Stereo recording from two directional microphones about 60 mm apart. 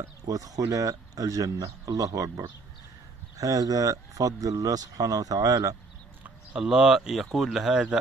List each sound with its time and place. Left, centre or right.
0.0 s speech: right
6.5 s speech: centre